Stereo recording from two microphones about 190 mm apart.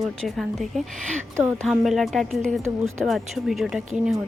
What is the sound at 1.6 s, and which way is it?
Speech, centre (ahead or behind).